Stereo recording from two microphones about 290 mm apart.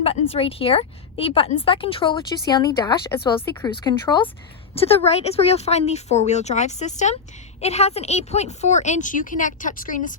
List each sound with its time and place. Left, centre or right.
0.0 s a woman's voice: centre